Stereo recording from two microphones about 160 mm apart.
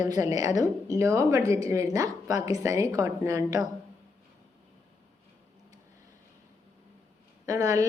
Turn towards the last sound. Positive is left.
turn(degrees=-20)  # may be behind; listen again after turning